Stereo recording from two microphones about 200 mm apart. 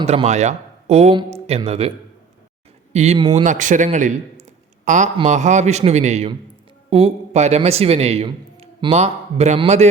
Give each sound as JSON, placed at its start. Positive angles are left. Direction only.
{"t": 0.0, "sound": "speech", "side_deg": -30}
{"t": 2.9, "sound": "a man's voice", "side_deg": -35}